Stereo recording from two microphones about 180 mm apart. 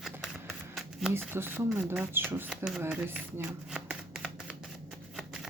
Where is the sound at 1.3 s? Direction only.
10° right (ahead or behind).